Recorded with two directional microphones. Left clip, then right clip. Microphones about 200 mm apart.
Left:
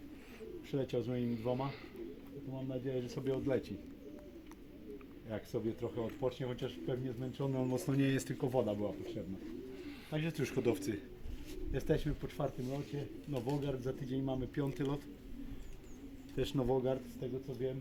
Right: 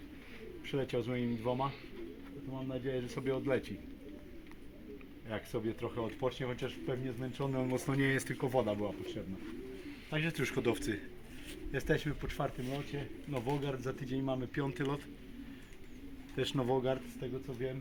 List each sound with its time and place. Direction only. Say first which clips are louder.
0.7 s speech: right 2 dB; 20° left (ahead or behind)
1.3 s speech: right 1 dB; 10° right (ahead or behind)
2.6 s speech: right 1 dB; 15° left (ahead or behind)
5.3 s speech: right 1 dB; 15° left (ahead or behind)
10.1 s speech: right 3 dB; 10° left (ahead or behind)
16.3 s speech: right 1 dB; 10° left (ahead or behind)